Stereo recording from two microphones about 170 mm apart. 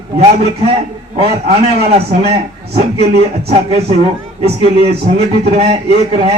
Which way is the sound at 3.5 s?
35° right (ahead or behind).